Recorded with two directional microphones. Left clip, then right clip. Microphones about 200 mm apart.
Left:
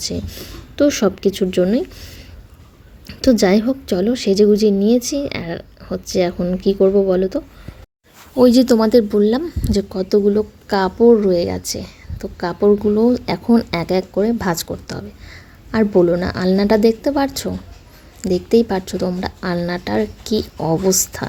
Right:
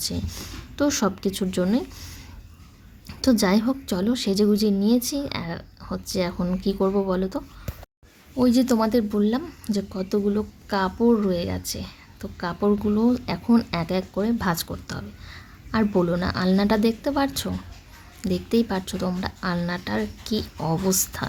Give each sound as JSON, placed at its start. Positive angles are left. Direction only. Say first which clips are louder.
{"t": 0.0, "sound": "a woman's voice", "louder": "left 5 dB", "side_deg": 5}
{"t": 8.4, "sound": "a woman's voice", "louder": "left 9 dB", "side_deg": 25}